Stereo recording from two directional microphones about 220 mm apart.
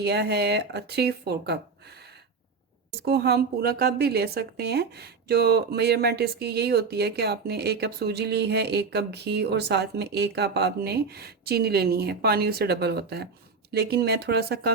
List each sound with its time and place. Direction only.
0.0 s a woman's voice: 50° right (ahead or behind)
3.0 s a woman's voice: 50° right (ahead or behind)